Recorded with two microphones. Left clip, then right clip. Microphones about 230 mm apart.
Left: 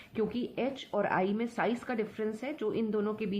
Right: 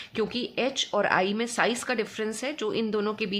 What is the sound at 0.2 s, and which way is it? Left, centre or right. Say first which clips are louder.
Speech: right 5 dB; right.